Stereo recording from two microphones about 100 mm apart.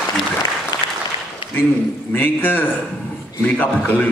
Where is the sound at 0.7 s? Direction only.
45° left (ahead or behind).